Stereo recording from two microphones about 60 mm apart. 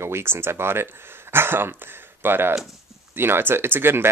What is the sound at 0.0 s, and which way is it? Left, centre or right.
Speech, right.